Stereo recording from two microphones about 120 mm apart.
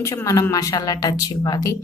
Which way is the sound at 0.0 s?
25° left (ahead or behind).